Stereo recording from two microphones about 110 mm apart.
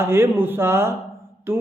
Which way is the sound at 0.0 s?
25° right (ahead or behind).